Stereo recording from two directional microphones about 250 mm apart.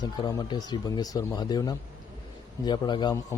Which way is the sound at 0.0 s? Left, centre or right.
Centre.